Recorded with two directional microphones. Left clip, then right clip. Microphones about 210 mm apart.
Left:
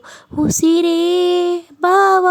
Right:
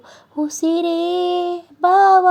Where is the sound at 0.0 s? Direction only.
25° left (ahead or behind).